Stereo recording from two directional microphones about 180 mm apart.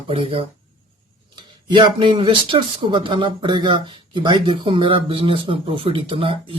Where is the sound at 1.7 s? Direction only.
25° right (ahead or behind).